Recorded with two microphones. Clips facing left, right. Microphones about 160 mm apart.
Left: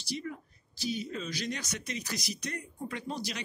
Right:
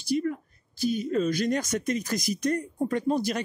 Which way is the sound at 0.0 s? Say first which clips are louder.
Right 11 dB; 50° right (ahead or behind).